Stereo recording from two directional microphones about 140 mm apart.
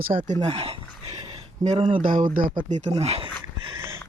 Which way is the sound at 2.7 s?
55° right (ahead or behind).